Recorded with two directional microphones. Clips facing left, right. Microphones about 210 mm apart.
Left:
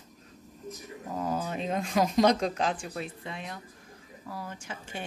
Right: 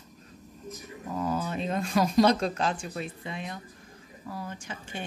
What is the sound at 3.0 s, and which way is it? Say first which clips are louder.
Speech: right 1 dB; centre (ahead or behind).